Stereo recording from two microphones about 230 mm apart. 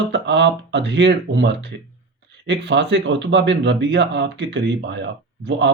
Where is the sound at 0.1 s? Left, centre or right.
Right.